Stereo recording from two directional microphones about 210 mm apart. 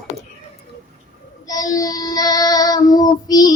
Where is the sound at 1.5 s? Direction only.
15° left (ahead or behind).